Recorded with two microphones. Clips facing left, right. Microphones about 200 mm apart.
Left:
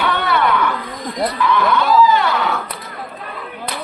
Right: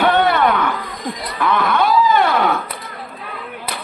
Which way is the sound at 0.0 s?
50° right (ahead or behind).